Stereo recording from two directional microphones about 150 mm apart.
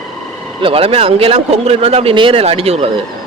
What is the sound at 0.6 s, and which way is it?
Speech, 40° right (ahead or behind).